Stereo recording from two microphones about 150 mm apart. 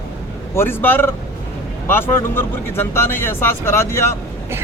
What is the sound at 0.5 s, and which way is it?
A man's voice, 15° left (ahead or behind).